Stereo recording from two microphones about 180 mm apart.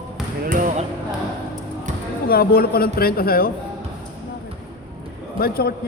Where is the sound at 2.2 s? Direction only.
55° left (ahead or behind).